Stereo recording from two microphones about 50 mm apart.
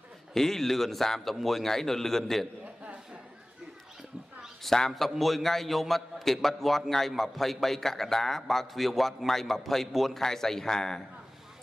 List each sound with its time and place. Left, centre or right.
0.3 s a man's voice: centre
4.6 s a man's voice: centre